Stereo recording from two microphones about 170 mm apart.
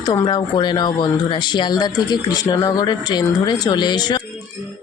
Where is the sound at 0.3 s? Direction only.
25° left (ahead or behind).